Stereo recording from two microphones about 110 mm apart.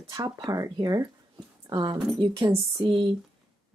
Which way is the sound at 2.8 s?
50° right (ahead or behind).